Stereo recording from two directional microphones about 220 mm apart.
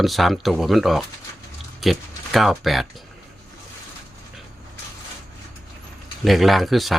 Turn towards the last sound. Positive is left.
turn(degrees=0)  # may be behind; listen again after turning